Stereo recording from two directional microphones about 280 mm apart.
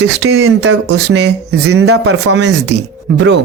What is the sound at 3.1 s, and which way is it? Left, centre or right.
Speech, right.